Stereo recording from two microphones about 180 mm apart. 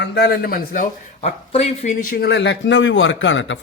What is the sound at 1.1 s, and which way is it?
Speech, 35° left (ahead or behind).